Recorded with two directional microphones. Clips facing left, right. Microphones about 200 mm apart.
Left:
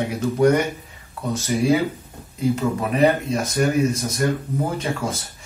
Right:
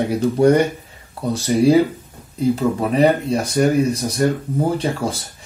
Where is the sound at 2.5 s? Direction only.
35° right (ahead or behind).